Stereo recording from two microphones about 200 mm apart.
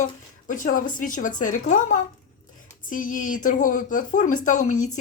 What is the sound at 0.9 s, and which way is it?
Speech, 40° left (ahead or behind).